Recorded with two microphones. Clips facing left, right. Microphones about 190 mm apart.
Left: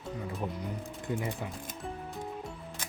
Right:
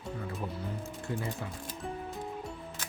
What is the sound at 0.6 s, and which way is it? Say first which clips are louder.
Speech: left 1 dB; 15° left (ahead or behind).